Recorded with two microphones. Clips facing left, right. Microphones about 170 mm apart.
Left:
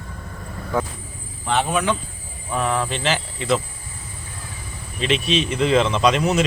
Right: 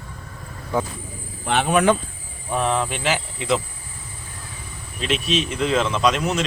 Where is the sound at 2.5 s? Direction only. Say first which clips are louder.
Even; 25° right (ahead or behind).